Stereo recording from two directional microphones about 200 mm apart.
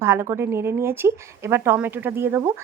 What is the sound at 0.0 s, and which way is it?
A woman's voice, 10° right (ahead or behind).